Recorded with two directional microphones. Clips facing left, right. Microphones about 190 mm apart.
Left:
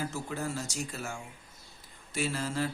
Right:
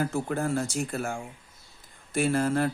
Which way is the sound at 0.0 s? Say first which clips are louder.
Right 7 dB; 55° right (ahead or behind).